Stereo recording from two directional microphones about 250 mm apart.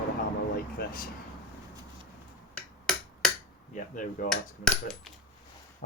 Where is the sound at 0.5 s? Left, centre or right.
Left.